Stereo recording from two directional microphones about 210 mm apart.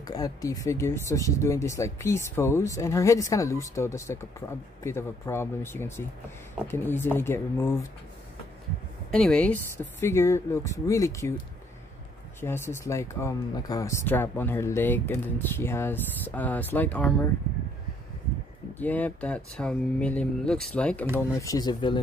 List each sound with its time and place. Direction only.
0.0 s speech: 20° left (ahead or behind)
9.1 s speech: 5° left (ahead or behind)
12.4 s speech: 10° left (ahead or behind)
18.8 s speech: 10° left (ahead or behind)